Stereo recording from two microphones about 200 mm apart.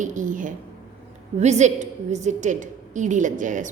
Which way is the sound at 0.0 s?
40° right (ahead or behind).